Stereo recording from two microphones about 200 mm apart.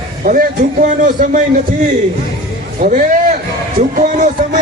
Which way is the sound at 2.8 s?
40° right (ahead or behind).